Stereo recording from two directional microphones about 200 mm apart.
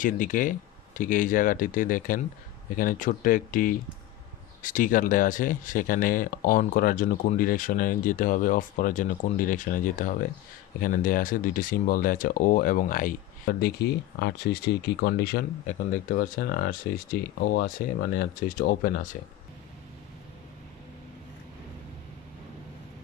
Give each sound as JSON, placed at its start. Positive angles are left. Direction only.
{"t": 0.0, "sound": "speech", "side_deg": 40}
{"t": 15.6, "sound": "speech", "side_deg": 40}